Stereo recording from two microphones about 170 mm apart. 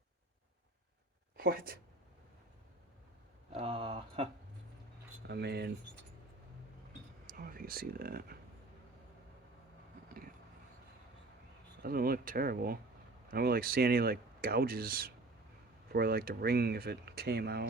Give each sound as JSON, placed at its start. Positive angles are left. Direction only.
{"t": 1.4, "sound": "speech", "side_deg": -60}
{"t": 3.5, "sound": "speech", "side_deg": -35}
{"t": 5.3, "sound": "speech", "side_deg": -75}
{"t": 7.3, "sound": "a sound", "side_deg": -55}
{"t": 11.8, "sound": "speech", "side_deg": -60}